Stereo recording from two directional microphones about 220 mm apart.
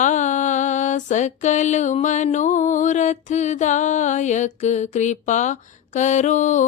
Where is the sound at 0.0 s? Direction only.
35° left (ahead or behind).